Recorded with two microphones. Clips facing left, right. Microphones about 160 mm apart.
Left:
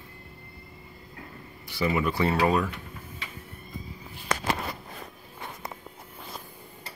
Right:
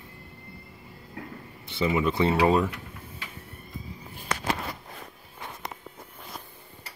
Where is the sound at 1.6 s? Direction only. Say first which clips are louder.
Right 1 dB; 20° right (ahead or behind).